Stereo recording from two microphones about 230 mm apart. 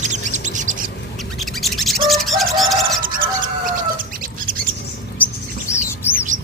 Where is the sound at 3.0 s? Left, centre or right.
Right.